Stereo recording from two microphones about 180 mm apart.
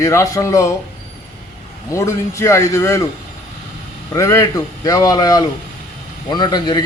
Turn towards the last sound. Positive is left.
turn(degrees=25)  # may be behind; listen again after turning